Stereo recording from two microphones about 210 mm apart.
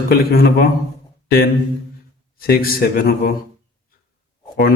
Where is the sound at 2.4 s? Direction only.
45° left (ahead or behind).